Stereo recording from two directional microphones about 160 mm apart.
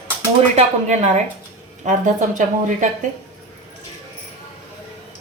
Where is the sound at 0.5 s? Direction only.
45° right (ahead or behind).